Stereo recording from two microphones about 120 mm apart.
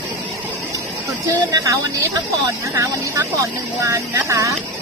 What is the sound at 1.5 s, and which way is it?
Speech, 25° right (ahead or behind).